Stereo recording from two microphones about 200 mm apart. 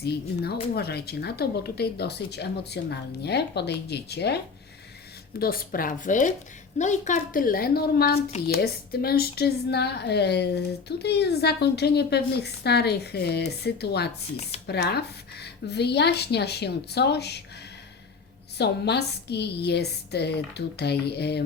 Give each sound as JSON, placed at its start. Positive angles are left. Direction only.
{"t": 0.0, "sound": "a woman's voice", "side_deg": 55}
{"t": 5.4, "sound": "a woman's voice", "side_deg": 45}
{"t": 18.5, "sound": "a woman's voice", "side_deg": 55}